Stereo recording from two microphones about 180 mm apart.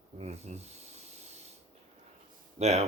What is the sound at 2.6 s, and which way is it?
Speech, 35° right (ahead or behind).